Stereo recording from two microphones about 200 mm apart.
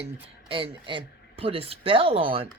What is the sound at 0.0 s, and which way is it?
Speech, 25° right (ahead or behind).